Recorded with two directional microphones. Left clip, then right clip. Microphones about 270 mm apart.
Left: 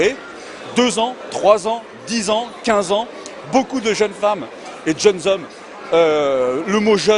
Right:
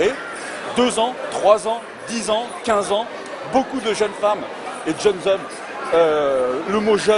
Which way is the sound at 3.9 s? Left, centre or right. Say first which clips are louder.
Left 1 dB; left.